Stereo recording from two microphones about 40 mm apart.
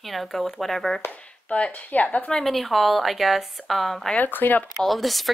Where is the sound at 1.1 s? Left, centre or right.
Left.